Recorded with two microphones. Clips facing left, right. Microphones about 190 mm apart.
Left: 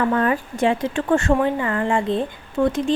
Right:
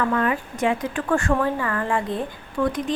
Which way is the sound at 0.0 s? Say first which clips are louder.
Left 3 dB; 35° left (ahead or behind).